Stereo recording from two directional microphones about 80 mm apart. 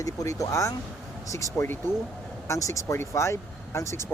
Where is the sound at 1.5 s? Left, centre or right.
Left.